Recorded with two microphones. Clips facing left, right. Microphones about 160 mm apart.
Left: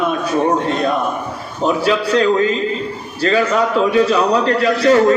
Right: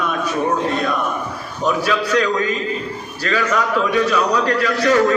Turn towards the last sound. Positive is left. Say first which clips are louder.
# left 4 dB
turn(degrees=30)  # may be behind; listen again after turning